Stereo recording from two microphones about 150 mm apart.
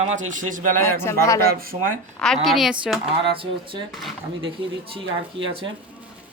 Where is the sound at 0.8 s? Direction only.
20° left (ahead or behind).